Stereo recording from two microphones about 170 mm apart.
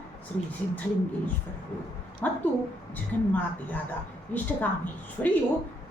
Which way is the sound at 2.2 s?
10° left (ahead or behind).